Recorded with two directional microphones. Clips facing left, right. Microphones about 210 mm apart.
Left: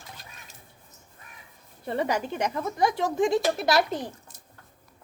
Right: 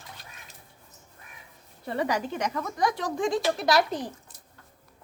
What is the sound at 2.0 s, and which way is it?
Speech, 25° left (ahead or behind).